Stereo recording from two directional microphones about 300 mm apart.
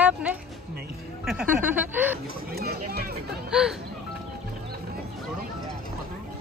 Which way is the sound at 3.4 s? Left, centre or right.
Centre.